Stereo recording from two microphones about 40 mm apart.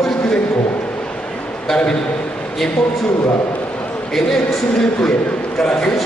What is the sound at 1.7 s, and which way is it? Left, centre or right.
Speech, left.